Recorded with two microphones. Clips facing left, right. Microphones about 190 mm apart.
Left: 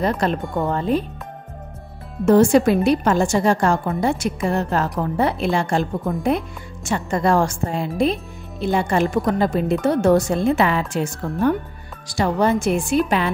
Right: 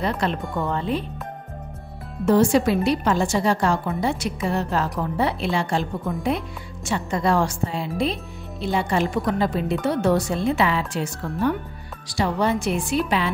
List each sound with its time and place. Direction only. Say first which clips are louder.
0.0 s a woman's voice: left 4 dB; 45° left (ahead or behind)
2.2 s a woman's voice: left 4 dB; 50° left (ahead or behind)